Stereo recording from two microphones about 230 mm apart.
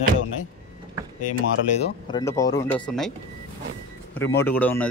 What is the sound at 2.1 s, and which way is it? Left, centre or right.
Speech, centre.